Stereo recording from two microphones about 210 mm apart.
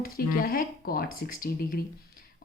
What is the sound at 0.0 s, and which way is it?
A woman's voice, 45° left (ahead or behind).